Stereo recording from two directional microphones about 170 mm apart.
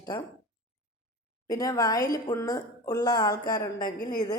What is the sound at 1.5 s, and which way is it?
A woman's voice, 20° left (ahead or behind).